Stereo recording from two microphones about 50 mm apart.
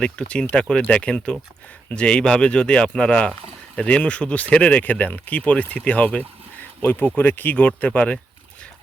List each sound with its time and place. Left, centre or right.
0.0 s speech: centre
6.8 s speech: left